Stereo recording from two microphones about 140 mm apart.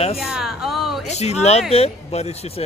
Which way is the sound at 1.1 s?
50° left (ahead or behind).